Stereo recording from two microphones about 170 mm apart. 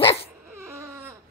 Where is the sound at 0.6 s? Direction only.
15° right (ahead or behind).